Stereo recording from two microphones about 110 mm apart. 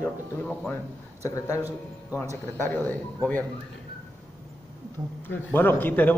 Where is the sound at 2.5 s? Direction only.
20° left (ahead or behind).